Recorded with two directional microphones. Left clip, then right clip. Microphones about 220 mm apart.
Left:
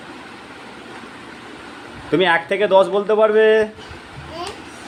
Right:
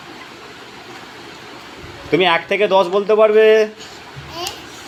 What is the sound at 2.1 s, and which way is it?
Speech, 5° right (ahead or behind).